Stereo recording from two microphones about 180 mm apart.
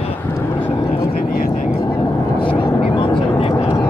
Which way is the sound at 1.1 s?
55° left (ahead or behind).